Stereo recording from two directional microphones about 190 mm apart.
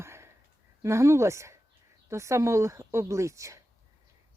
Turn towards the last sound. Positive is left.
turn(degrees=-15)  # may be behind; listen again after turning